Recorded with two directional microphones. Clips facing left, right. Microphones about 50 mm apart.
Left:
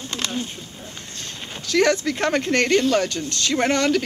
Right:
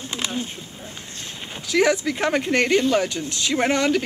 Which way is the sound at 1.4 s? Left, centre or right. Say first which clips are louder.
Even; centre.